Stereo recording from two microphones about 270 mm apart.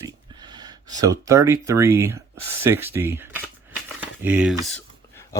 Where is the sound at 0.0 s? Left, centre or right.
Centre.